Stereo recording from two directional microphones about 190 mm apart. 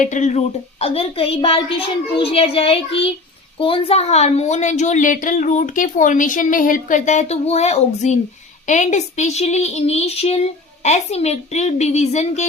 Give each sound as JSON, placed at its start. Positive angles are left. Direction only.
{"t": 0.0, "sound": "a woman's voice", "side_deg": 40}